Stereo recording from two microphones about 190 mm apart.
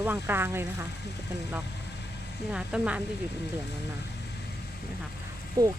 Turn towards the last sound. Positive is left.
turn(degrees=-20)  # may be behind; listen again after turning